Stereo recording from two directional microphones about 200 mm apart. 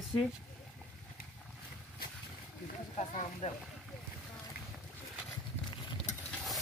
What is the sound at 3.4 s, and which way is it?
Boat, 35° left (ahead or behind).